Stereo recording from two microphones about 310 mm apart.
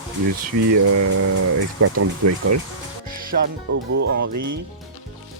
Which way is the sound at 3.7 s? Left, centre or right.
Right.